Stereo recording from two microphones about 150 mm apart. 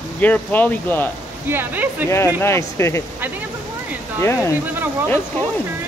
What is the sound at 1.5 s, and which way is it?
Speech, 15° right (ahead or behind).